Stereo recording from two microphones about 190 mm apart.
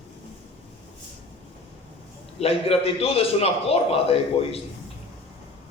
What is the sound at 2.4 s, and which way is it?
A man's voice, 30° left (ahead or behind).